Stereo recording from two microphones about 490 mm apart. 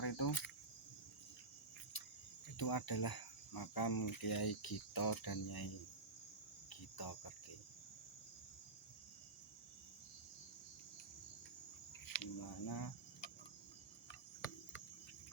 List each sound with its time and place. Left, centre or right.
0.0 s cricket: left
2.6 s speech: left
6.7 s cricket: left
12.0 s a sound: left